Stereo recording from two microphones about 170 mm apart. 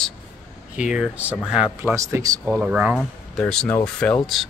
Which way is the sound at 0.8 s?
5° right (ahead or behind).